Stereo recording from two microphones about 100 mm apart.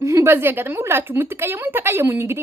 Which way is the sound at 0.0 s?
30° right (ahead or behind).